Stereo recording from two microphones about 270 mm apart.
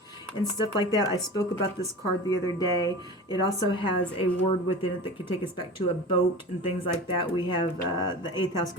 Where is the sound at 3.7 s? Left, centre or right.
Centre.